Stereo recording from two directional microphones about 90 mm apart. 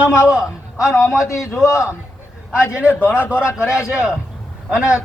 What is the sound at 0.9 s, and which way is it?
Speech, 35° left (ahead or behind).